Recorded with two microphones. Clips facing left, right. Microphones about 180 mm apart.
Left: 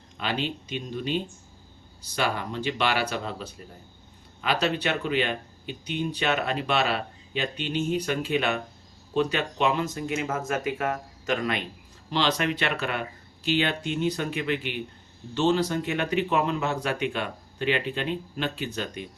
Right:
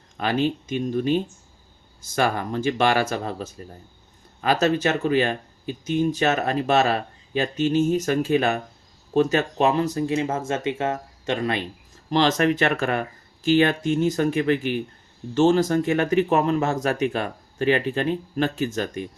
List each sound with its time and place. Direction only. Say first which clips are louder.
0.2 s speech: right 7 dB; 45° right (ahead or behind)
12.1 s speech: right 6 dB; 45° right (ahead or behind)